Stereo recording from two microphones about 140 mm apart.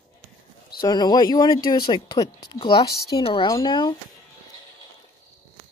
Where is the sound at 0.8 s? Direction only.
30° left (ahead or behind).